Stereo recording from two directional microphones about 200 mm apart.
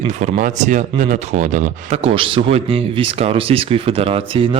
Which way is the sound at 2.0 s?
25° right (ahead or behind).